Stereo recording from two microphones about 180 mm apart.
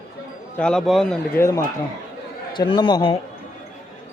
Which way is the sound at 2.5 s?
25° left (ahead or behind).